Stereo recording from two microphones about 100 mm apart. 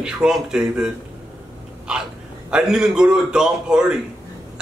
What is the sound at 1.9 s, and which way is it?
Hiccup, 10° right (ahead or behind).